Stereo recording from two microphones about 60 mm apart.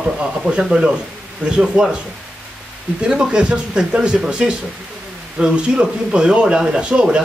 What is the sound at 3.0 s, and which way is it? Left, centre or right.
A man's voice, centre.